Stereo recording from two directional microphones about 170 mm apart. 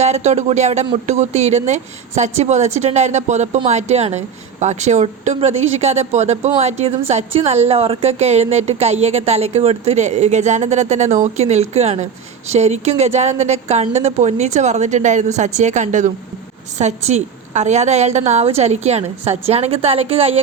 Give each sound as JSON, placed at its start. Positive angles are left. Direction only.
{"t": 0.0, "sound": "a woman's voice", "side_deg": -40}